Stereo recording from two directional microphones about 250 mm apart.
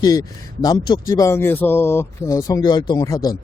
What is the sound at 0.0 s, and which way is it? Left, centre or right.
Speech, centre.